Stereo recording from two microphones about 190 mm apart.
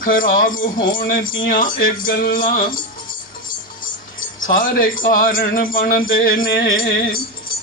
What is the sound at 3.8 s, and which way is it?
Music, 45° left (ahead or behind).